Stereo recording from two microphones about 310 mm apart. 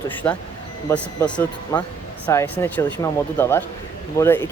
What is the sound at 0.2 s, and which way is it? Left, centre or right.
Speech, centre.